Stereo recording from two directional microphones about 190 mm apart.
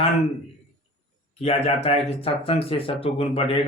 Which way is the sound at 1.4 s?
30° left (ahead or behind).